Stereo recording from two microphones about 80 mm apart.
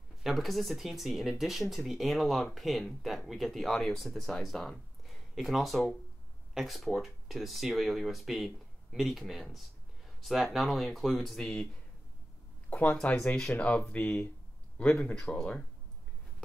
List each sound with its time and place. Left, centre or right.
0.2 s speech: centre
12.6 s a sound: left
12.9 s speech: centre